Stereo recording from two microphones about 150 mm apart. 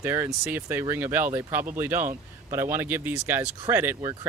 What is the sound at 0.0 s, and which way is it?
Speech, 15° right (ahead or behind).